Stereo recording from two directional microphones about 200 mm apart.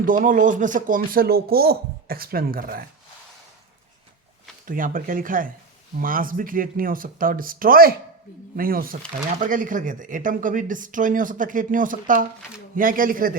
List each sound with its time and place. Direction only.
0.0 s speech: 40° right (ahead or behind)
4.6 s speech: 45° right (ahead or behind)